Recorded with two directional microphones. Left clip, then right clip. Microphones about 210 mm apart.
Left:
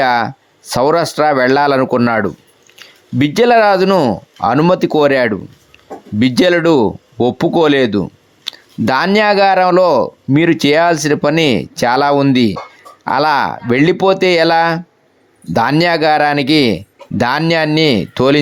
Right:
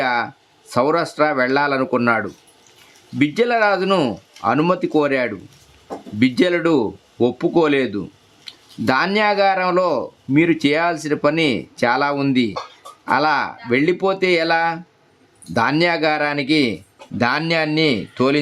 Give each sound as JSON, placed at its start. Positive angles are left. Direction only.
{"t": 0.0, "sound": "speech", "side_deg": 40}